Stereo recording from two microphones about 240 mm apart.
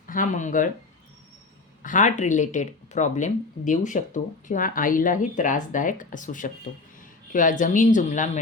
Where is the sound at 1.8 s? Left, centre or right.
Left.